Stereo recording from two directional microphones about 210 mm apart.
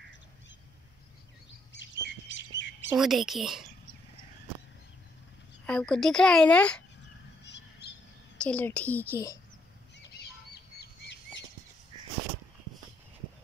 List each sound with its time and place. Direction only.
1.7 s chirp: 55° left (ahead or behind)
3.0 s a woman's voice: centre (ahead or behind)
5.7 s a woman's voice: 5° left (ahead or behind)
8.4 s a woman's voice: 5° left (ahead or behind)
10.8 s bird flight: 55° left (ahead or behind)